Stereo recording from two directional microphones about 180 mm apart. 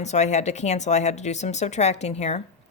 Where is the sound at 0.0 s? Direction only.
40° left (ahead or behind).